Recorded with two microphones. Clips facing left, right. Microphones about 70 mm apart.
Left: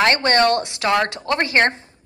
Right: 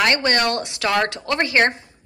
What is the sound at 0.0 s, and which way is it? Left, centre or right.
Speech, left.